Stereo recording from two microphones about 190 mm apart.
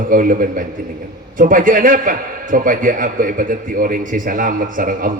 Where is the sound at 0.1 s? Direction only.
45° right (ahead or behind).